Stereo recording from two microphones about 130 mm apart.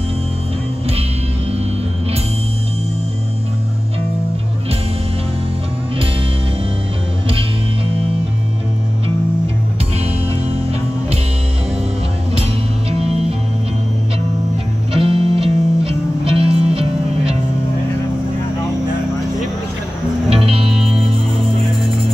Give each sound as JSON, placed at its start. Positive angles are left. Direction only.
{"t": 14.9, "sound": "music", "side_deg": -45}
{"t": 20.2, "sound": "music", "side_deg": -45}
{"t": 20.6, "sound": "music", "side_deg": -5}